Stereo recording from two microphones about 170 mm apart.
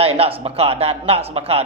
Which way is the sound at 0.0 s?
35° right (ahead or behind).